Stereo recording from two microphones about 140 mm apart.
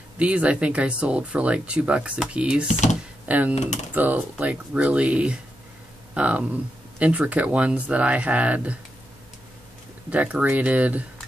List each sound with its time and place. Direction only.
0.2 s speech: 10° right (ahead or behind)
2.7 s speech: 60° left (ahead or behind)
3.3 s speech: 10° right (ahead or behind)
10.0 s speech: 10° right (ahead or behind)